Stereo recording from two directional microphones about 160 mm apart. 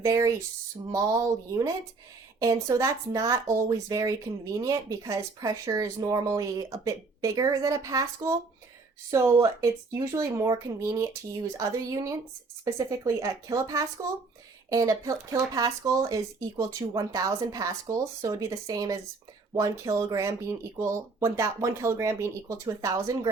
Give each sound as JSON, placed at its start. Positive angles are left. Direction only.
{"t": 0.0, "sound": "speech", "side_deg": -20}
{"t": 2.4, "sound": "speech", "side_deg": -20}